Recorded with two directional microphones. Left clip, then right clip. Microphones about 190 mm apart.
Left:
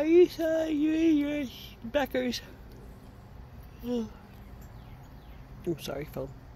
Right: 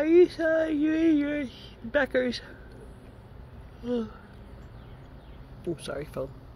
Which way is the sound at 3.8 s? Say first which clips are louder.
Right 3 dB; 15° left (ahead or behind).